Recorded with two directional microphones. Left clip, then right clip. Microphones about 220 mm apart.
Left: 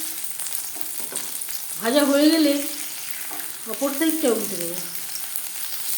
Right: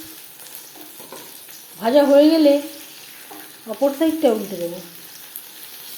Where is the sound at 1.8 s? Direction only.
5° right (ahead or behind).